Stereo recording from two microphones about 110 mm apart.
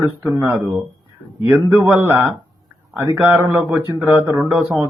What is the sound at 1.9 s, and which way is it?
Speech, 20° right (ahead or behind).